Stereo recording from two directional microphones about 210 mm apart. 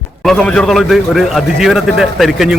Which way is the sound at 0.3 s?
5° left (ahead or behind).